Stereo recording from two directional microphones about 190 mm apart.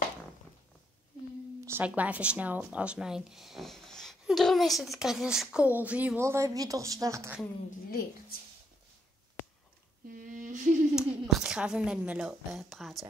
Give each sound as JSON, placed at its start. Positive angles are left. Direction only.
{"t": 1.7, "sound": "speech", "side_deg": -10}
{"t": 10.0, "sound": "humming", "side_deg": -45}
{"t": 11.0, "sound": "a woman's voice", "side_deg": 0}